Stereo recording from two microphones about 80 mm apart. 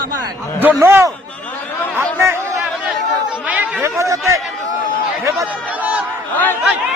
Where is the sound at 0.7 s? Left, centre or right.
Right.